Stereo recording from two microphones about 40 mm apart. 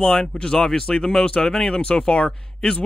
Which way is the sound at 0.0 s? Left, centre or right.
Centre.